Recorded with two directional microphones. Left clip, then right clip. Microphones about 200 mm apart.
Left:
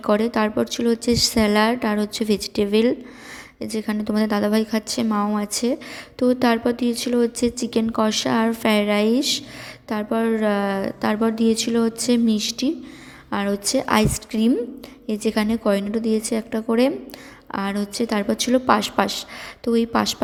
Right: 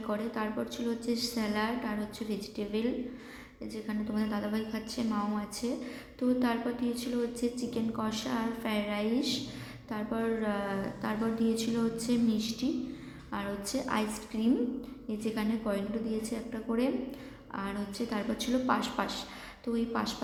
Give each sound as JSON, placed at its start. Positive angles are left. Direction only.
{"t": 0.0, "sound": "a woman's voice", "side_deg": 50}